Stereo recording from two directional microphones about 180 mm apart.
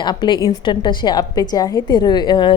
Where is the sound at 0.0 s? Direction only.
25° left (ahead or behind).